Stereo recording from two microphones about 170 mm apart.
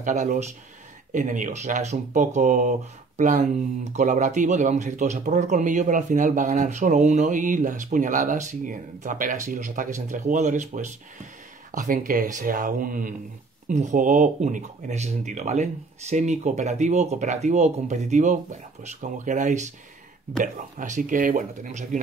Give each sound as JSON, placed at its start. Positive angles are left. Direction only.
{"t": 0.0, "sound": "speech", "side_deg": -45}